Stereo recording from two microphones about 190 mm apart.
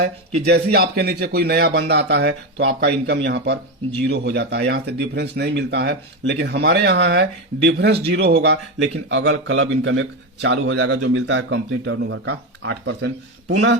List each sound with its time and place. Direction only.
0.4 s speech: 60° right (ahead or behind)